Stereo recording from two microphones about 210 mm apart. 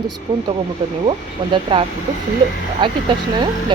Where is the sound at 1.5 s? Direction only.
25° right (ahead or behind).